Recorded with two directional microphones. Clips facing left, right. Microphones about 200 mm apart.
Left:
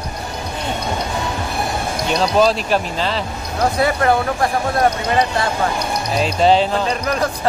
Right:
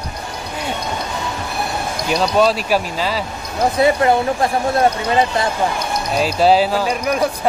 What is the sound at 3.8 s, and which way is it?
Speech, 20° right (ahead or behind).